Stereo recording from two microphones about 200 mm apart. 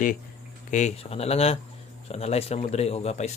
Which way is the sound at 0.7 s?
35° left (ahead or behind).